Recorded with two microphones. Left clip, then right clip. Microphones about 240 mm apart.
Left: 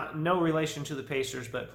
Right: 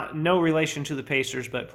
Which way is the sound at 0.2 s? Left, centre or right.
Right.